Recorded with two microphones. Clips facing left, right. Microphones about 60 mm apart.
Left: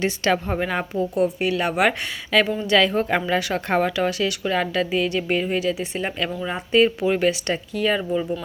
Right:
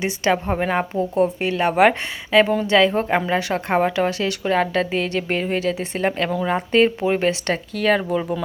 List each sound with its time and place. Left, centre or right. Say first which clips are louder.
0.0 s speech: right 1 dB; right
7.5 s speech: right 3 dB; right